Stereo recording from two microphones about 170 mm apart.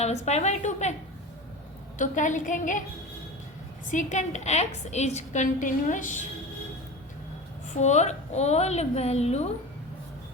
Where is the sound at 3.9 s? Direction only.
45° left (ahead or behind).